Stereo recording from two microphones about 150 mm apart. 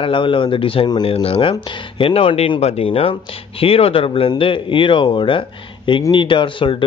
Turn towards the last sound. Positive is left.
turn(degrees=35)  # may be behind; listen again after turning